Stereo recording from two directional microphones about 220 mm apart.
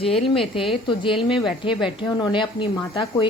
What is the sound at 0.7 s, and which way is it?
A woman's voice, 25° left (ahead or behind).